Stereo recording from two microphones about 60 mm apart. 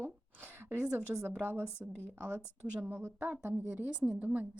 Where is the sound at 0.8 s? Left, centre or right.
Centre.